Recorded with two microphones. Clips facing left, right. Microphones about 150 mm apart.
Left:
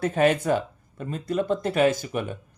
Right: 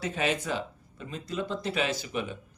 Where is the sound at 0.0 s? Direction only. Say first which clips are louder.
Left 9 dB; 55° left (ahead or behind).